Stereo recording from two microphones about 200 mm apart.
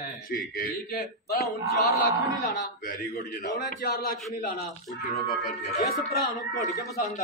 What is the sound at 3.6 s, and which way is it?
Speech, 50° left (ahead or behind).